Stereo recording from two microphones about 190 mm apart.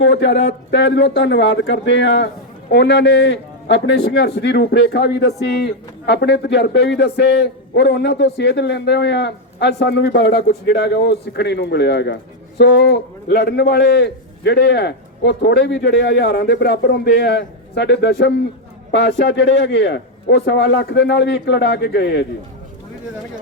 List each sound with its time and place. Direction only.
0.0 s a man's voice: 70° left (ahead or behind)